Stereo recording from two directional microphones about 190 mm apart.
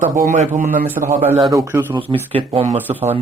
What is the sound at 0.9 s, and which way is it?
Speech, 10° right (ahead or behind).